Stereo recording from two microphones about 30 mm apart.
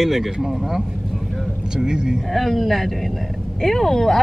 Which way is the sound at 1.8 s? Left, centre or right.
Right.